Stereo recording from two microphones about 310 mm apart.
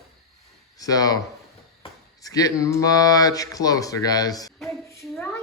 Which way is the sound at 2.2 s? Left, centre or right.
Centre.